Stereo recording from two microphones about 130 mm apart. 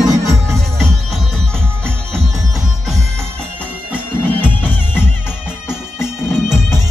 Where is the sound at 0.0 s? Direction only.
Centre (ahead or behind).